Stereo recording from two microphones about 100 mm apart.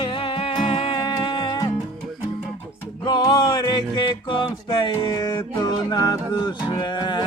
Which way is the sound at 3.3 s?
45° left (ahead or behind).